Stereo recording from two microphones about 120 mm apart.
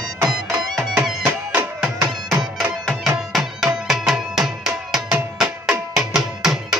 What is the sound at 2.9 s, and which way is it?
Music, centre (ahead or behind).